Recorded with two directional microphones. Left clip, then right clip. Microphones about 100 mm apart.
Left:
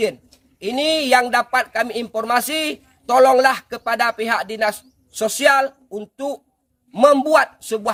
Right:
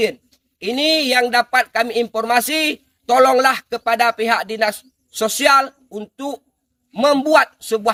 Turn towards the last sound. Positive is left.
turn(degrees=45)  # may be behind; listen again after turning